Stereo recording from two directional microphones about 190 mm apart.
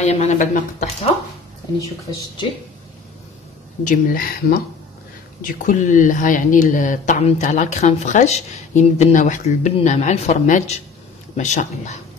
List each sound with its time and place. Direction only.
0.0 s speech: 35° left (ahead or behind)
3.8 s speech: 45° left (ahead or behind)